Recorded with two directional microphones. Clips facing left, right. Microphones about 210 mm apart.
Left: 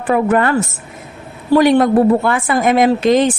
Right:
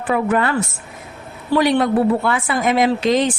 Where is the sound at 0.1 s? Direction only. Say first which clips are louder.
Left 4 dB; 50° left (ahead or behind).